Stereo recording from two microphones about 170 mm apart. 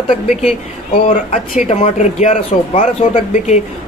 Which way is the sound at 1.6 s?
40° left (ahead or behind).